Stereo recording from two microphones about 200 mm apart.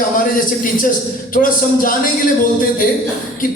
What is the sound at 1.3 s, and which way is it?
Speech, 45° left (ahead or behind).